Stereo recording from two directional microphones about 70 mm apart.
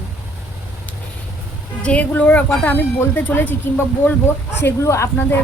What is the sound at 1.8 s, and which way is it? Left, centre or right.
A woman's voice, centre.